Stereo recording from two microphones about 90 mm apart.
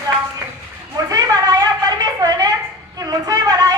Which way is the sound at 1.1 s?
40° right (ahead or behind).